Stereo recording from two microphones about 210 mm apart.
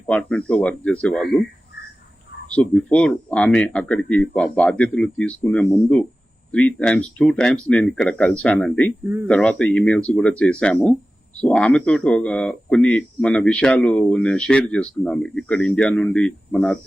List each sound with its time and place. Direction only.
0.1 s speech: 5° left (ahead or behind)
2.5 s speech: 5° left (ahead or behind)